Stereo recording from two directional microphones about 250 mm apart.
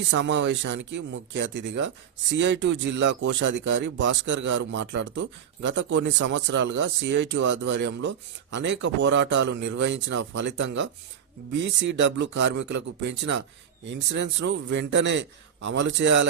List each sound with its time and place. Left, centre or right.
0.1 s speech: right